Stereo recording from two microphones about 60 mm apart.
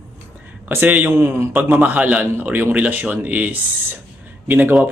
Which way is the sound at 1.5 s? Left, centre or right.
Right.